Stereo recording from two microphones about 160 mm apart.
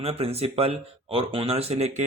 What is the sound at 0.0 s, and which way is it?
Speech, 40° right (ahead or behind).